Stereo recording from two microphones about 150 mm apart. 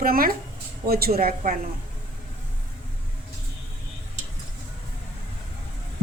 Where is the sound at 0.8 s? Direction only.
90° right.